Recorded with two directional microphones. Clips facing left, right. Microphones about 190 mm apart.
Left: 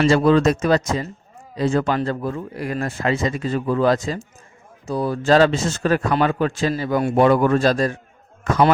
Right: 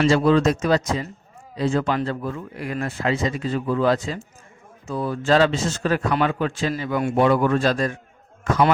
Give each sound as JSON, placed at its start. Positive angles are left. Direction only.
{"t": 0.0, "sound": "speech", "side_deg": 50}
{"t": 2.0, "sound": "speech", "side_deg": 35}